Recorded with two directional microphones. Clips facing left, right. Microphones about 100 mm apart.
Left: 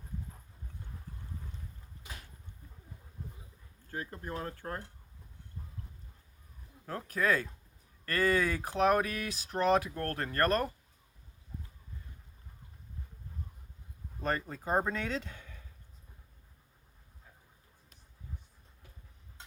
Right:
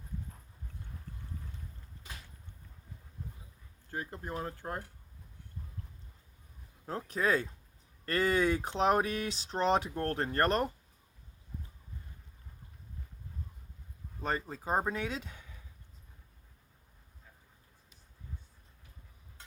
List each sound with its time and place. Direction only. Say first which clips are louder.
3.8 s speech: even; 20° right (ahead or behind)
6.8 s speech: even; 25° right (ahead or behind)
14.2 s a sound: left 1 dB; 15° right (ahead or behind)
14.7 s speech: left 1 dB; 10° right (ahead or behind)